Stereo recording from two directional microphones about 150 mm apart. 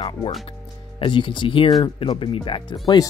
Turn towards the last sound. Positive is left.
turn(degrees=30)  # may be behind; listen again after turning